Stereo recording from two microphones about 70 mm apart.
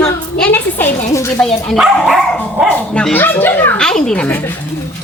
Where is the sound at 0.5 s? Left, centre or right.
Left.